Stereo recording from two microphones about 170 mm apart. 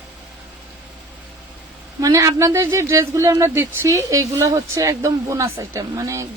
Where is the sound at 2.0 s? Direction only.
20° right (ahead or behind).